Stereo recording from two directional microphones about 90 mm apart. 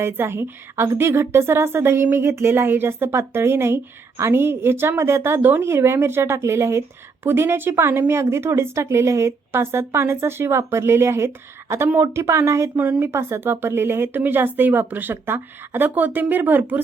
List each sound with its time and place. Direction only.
0.0 s speech: 25° right (ahead or behind)
12.7 s speech: 20° right (ahead or behind)